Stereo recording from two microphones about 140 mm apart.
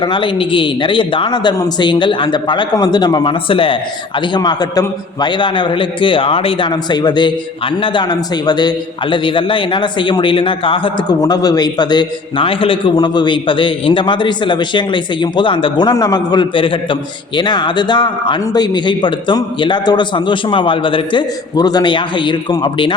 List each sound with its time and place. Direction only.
0.0 s a man's voice: 35° left (ahead or behind)
4.4 s a man's voice: 30° left (ahead or behind)
8.4 s a man's voice: 30° left (ahead or behind)
11.2 s a man's voice: 25° left (ahead or behind)